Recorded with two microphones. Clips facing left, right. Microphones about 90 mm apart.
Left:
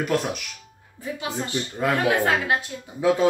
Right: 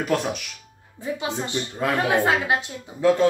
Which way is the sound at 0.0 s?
Centre (ahead or behind).